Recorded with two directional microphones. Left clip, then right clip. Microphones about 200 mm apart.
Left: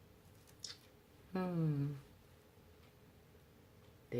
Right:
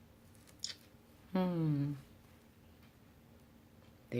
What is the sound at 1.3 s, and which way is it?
Speech, 45° right (ahead or behind).